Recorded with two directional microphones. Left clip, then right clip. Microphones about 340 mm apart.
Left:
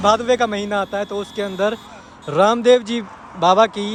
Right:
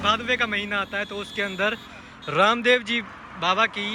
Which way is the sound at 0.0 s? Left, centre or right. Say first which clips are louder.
Left 7 dB; centre.